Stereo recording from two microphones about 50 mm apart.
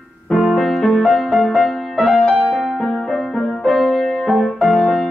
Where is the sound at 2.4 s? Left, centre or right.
Centre.